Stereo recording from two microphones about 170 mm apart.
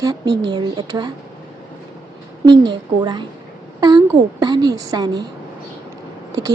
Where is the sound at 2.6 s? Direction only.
25° right (ahead or behind).